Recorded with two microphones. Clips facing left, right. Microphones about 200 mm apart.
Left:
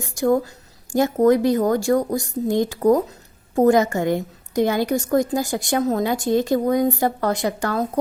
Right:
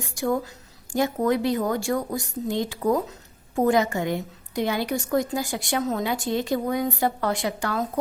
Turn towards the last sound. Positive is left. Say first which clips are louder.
# left 4 dB
turn(degrees=45)  # may be behind; listen again after turning